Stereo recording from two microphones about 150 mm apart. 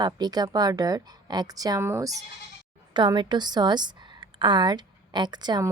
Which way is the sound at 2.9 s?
30° right (ahead or behind).